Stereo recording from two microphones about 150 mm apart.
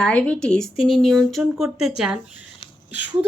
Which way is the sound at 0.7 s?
35° left (ahead or behind).